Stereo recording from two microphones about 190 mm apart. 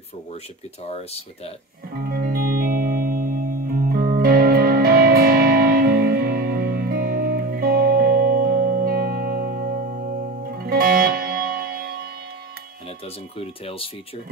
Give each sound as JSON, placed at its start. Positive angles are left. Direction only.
{"t": 0.8, "sound": "speech", "side_deg": 35}
{"t": 2.0, "sound": "music", "side_deg": -50}
{"t": 13.4, "sound": "speech", "side_deg": 30}